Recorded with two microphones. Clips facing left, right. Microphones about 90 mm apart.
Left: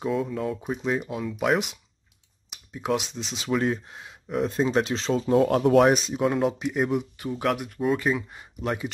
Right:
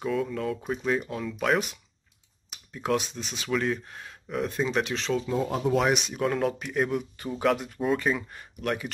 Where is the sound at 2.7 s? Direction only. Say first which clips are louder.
Left 1 dB; 15° left (ahead or behind); by 5.3 s 35° left (ahead or behind).